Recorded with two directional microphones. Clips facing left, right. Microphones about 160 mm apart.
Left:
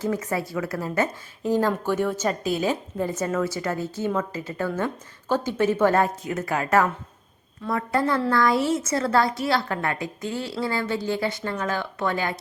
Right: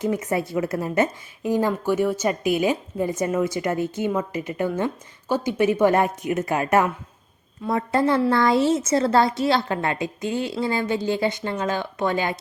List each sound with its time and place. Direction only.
0.0 s a woman's voice: 20° right (ahead or behind)